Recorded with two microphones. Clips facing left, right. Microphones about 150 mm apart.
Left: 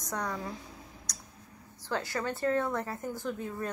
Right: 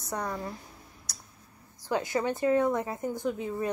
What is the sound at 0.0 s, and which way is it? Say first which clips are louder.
Speech: right 2 dB; 5° right (ahead or behind).